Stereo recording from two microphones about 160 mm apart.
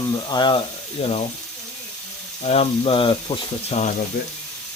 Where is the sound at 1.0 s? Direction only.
40° left (ahead or behind).